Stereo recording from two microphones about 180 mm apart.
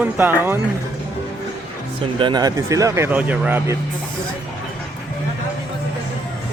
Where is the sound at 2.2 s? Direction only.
20° right (ahead or behind).